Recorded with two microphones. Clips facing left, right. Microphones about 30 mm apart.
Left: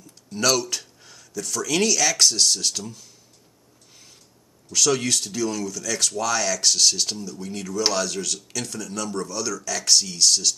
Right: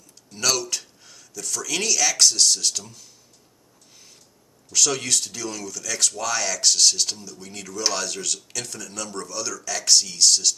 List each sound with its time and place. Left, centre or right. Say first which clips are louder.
0.3 s speech: left 2 dB; centre
4.6 s speech: left 2 dB; centre